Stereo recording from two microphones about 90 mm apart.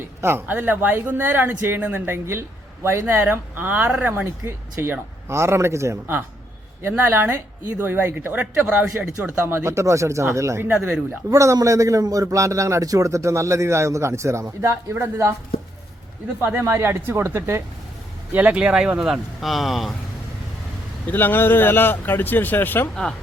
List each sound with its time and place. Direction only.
0.2 s speech: 25° right (ahead or behind)
11.3 s a man's voice: 40° right (ahead or behind)
16.6 s speech: 30° right (ahead or behind)
18.3 s speech: 15° right (ahead or behind)
21.1 s speech: 20° left (ahead or behind)